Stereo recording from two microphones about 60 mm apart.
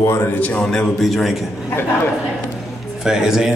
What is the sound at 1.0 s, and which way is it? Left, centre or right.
Speech, centre.